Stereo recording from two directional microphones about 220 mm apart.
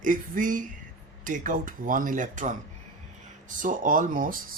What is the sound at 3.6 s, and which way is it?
Speech, 35° right (ahead or behind).